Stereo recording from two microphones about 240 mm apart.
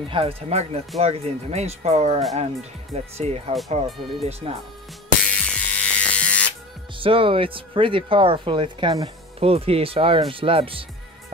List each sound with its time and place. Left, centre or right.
0.1 s speech: right
5.2 s electric shaver: centre
7.0 s speech: right